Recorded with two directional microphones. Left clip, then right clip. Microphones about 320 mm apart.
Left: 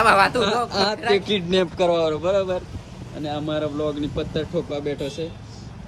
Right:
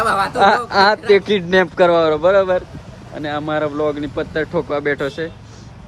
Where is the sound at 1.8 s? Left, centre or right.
Right.